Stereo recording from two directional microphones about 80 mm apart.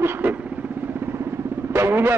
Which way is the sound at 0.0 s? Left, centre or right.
Right.